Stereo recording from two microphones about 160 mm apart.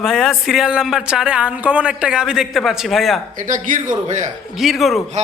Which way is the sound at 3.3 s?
55° right (ahead or behind).